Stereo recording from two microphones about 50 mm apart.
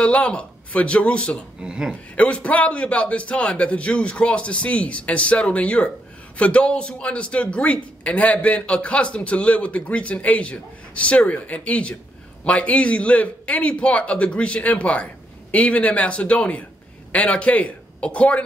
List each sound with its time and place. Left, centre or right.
0.0 s speech: left
1.6 s speech: centre
2.1 s a man's voice: left